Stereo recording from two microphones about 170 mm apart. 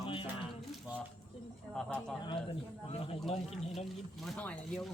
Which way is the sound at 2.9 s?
35° left (ahead or behind).